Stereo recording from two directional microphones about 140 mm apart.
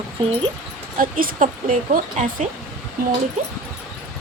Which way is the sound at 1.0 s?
75° right (ahead or behind).